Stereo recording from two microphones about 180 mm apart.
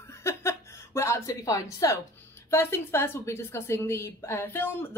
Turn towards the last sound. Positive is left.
turn(degrees=10)  # may be behind; listen again after turning